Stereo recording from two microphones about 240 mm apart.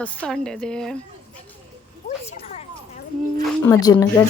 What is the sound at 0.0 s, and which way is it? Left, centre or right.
Speech, centre.